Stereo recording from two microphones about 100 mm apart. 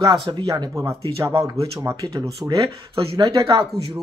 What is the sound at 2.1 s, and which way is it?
Speech, 40° right (ahead or behind).